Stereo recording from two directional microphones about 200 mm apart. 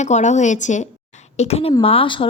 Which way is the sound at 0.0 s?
35° left (ahead or behind).